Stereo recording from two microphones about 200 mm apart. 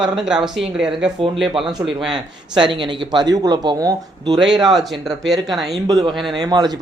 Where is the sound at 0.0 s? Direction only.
5° right (ahead or behind).